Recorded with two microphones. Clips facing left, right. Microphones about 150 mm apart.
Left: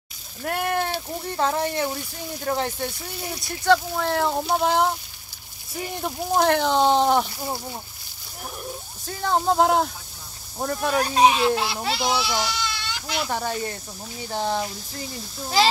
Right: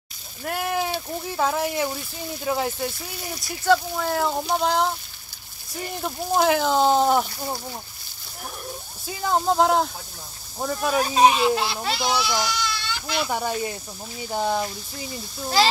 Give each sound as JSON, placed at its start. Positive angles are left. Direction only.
{"t": 0.4, "sound": "speech", "side_deg": 0}
{"t": 9.0, "sound": "a child's voice", "side_deg": -5}
{"t": 12.3, "sound": "speech", "side_deg": 25}
{"t": 13.0, "sound": "speech", "side_deg": 0}